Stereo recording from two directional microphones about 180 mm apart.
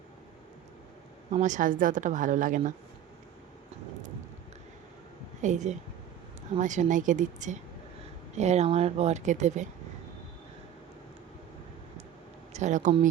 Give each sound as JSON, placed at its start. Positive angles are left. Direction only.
{"t": 1.3, "sound": "speech", "side_deg": -45}
{"t": 5.4, "sound": "speech", "side_deg": -40}
{"t": 12.5, "sound": "speech", "side_deg": -40}